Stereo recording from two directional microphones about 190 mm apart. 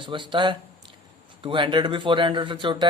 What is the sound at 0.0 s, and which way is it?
Speech, 25° right (ahead or behind).